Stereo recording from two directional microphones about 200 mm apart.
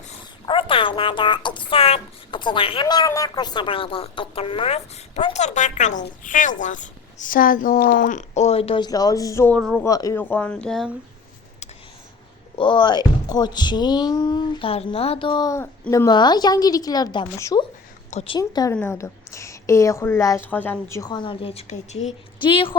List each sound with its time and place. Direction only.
0.4 s a woman's voice: 25° left (ahead or behind); by 10.9 s centre (ahead or behind)
12.5 s speech: 25° left (ahead or behind)
18.1 s speech: 30° left (ahead or behind)
18.3 s a woman's voice: 20° left (ahead or behind)